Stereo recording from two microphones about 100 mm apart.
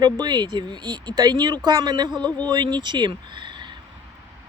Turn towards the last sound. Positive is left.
turn(degrees=-50)  # may be behind; listen again after turning